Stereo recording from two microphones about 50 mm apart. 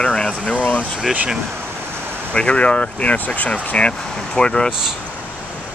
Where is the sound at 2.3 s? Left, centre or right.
Left.